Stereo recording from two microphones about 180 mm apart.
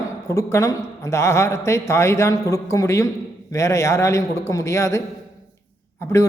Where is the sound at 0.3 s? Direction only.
15° left (ahead or behind).